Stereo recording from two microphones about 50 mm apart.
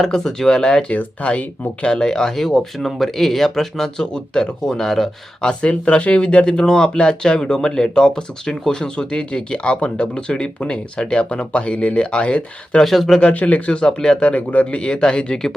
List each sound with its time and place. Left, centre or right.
0.0 s speech: centre
0.9 s speech: left
4.6 s speech: centre
5.5 s speech: left
12.8 s speech: centre
13.3 s speech: left
14.3 s speech: left
14.8 s speech: centre